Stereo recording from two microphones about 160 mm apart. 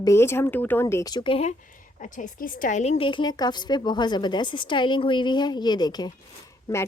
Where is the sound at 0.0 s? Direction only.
15° left (ahead or behind); by 1.5 s 35° left (ahead or behind).